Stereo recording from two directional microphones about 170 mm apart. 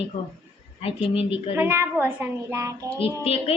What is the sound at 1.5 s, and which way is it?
A child's voice, 15° right (ahead or behind).